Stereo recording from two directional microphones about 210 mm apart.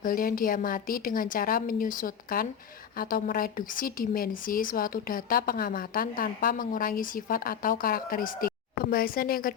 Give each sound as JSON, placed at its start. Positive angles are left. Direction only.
{"t": 0.0, "sound": "a woman's voice", "side_deg": 40}